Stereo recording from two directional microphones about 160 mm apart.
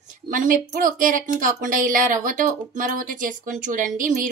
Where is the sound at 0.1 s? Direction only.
55° right (ahead or behind).